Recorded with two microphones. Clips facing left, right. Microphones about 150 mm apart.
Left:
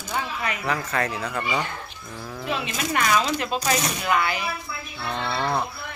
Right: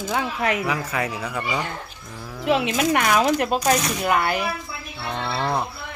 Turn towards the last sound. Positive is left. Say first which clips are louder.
# right 1 dB
turn(degrees=-10)  # may be behind; listen again after turning